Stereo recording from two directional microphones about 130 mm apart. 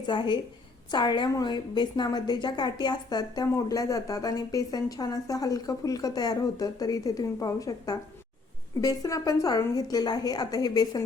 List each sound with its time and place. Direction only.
0.1 s a woman's voice: 40° left (ahead or behind)